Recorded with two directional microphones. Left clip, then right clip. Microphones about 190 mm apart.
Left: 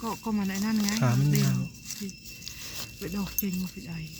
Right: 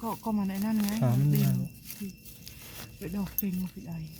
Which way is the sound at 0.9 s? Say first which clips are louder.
Left 2 dB; 5° right (ahead or behind).